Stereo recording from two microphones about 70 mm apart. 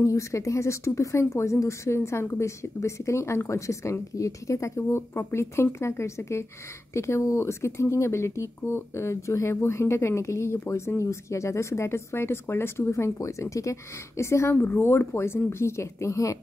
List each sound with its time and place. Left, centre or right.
0.0 s speech: left
14.5 s speech: left